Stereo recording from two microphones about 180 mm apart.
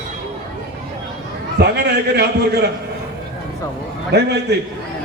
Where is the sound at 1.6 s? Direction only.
70° right (ahead or behind).